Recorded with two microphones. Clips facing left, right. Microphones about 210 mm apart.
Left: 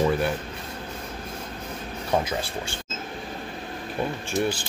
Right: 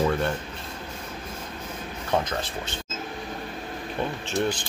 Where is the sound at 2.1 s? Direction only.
10° left (ahead or behind).